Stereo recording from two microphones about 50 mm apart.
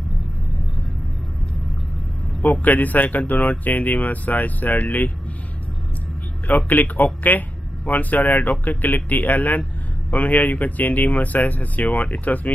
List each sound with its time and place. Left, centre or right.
2.4 s speech: left
6.4 s speech: left